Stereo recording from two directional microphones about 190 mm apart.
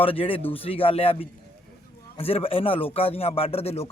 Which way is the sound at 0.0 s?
30° left (ahead or behind).